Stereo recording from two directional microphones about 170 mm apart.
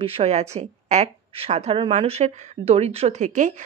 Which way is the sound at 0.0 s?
35° right (ahead or behind).